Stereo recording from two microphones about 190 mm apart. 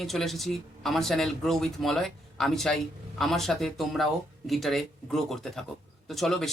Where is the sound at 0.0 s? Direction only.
Centre (ahead or behind).